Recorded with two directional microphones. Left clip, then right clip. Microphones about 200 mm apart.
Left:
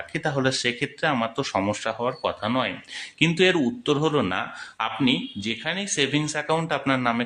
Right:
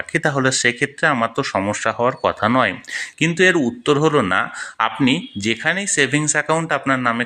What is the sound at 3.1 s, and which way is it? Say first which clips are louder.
Speech: right 5 dB; 15° right (ahead or behind).